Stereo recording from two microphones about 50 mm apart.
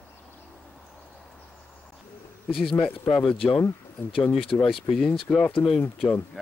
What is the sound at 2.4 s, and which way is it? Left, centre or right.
Speech, centre.